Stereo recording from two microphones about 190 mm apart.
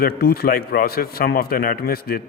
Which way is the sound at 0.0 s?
55° left (ahead or behind).